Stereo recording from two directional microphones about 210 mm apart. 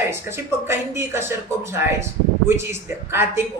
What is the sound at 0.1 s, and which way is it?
Speech, 10° right (ahead or behind).